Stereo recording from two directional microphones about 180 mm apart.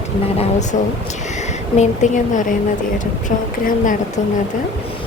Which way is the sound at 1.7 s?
40° left (ahead or behind).